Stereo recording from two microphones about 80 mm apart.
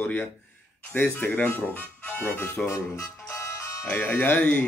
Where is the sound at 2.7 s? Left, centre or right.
Left.